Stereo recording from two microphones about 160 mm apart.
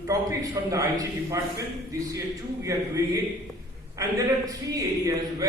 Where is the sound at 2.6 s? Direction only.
20° right (ahead or behind).